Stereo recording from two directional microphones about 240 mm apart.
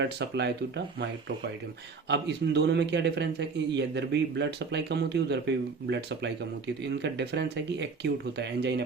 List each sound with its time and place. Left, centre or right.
0.0 s a man's voice: right
2.0 s a man's voice: right